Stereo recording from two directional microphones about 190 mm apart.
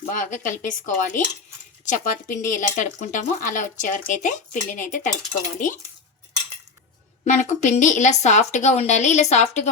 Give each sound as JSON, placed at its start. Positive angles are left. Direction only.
{"t": 0.1, "sound": "speech", "side_deg": 45}
{"t": 7.3, "sound": "a woman's voice", "side_deg": 40}